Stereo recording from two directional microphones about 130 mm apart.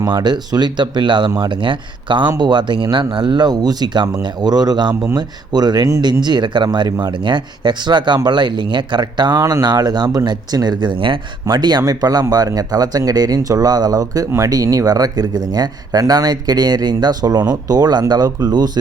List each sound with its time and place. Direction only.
0.0 s speech: 35° right (ahead or behind)